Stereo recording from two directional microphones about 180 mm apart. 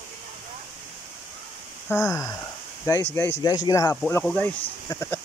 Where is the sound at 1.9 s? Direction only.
15° left (ahead or behind).